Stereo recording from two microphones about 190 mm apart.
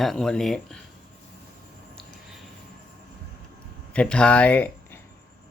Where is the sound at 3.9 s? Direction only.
5° left (ahead or behind).